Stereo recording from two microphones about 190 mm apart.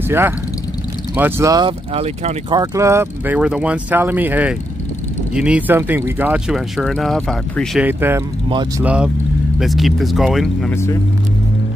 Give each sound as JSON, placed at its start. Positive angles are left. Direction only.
{"t": 1.1, "sound": "speech", "side_deg": -15}
{"t": 2.6, "sound": "speech", "side_deg": -15}
{"t": 7.8, "sound": "speech", "side_deg": -10}
{"t": 8.5, "sound": "speech", "side_deg": -25}
{"t": 8.8, "sound": "speech", "side_deg": -5}
{"t": 10.7, "sound": "speech", "side_deg": 15}